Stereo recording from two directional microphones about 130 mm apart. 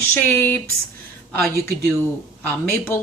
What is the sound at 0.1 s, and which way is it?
Speech, 15° left (ahead or behind).